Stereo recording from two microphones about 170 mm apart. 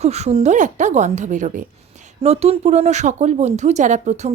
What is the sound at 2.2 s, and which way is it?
Speech, 35° right (ahead or behind).